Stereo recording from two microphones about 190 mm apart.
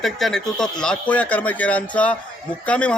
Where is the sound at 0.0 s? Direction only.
Centre (ahead or behind).